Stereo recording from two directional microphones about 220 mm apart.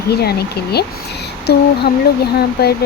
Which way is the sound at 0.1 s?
45° left (ahead or behind).